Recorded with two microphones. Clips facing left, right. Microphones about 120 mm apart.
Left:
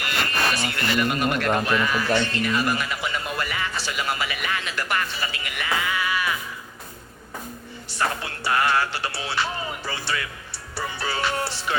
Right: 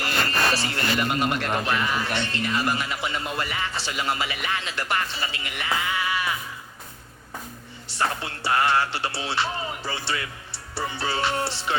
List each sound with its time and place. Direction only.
0.0 s speech: 30° right (ahead or behind)
7.9 s speech: 25° right (ahead or behind)